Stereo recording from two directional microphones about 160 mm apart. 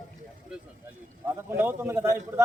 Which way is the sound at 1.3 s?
15° right (ahead or behind).